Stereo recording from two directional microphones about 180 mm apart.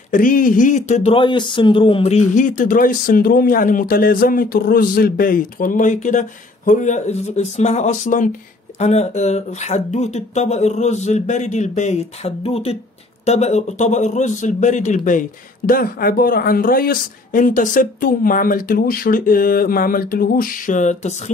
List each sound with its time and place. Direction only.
0.1 s speech: 50° left (ahead or behind)